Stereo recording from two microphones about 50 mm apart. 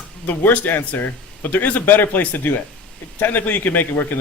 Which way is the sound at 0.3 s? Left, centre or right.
Left.